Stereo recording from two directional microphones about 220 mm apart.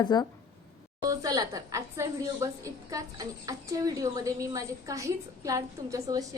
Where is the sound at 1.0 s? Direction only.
15° right (ahead or behind).